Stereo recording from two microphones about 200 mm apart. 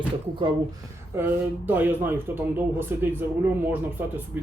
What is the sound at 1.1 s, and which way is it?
Speech, 10° right (ahead or behind).